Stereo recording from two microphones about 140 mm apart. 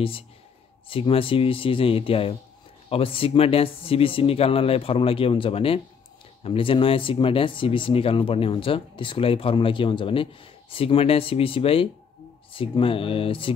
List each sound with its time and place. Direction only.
0.8 s speech: 40° left (ahead or behind)